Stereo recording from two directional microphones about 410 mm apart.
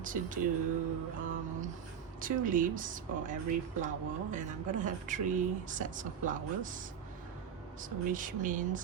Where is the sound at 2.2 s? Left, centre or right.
Centre.